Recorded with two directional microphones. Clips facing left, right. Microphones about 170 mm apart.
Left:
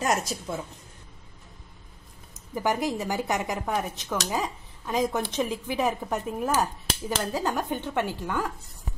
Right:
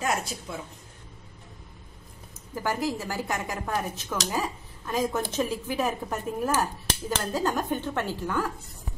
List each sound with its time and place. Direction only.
0.0 s a woman's voice: 40° left (ahead or behind)
2.5 s speech: 15° left (ahead or behind)